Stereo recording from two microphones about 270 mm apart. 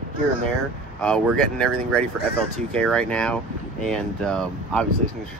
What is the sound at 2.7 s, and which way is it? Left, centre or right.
Speech, centre.